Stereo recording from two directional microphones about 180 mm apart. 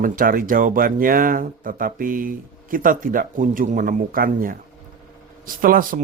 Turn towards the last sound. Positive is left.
turn(degrees=-50)  # may be behind; listen again after turning